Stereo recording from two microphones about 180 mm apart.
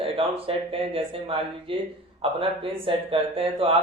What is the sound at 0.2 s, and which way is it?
Speech, 30° right (ahead or behind).